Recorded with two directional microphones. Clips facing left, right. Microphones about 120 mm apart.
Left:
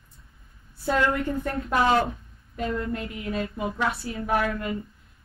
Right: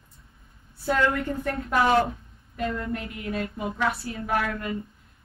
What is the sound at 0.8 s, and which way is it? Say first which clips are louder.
Female singing: even; 25° left (ahead or behind).